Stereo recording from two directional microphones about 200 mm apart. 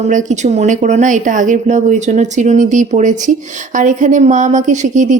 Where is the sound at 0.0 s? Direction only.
40° right (ahead or behind).